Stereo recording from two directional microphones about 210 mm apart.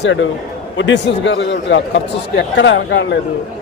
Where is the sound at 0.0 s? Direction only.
60° left (ahead or behind).